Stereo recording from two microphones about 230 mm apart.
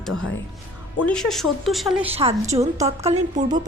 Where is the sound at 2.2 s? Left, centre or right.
Right.